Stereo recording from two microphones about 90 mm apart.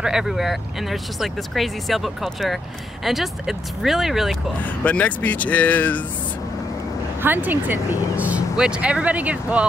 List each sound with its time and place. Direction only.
0.0 s speech: 5° right (ahead or behind)
4.8 s speech: 15° left (ahead or behind)
7.2 s speech: 20° right (ahead or behind)